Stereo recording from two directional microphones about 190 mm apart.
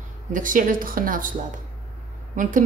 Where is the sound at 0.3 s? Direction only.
45° right (ahead or behind).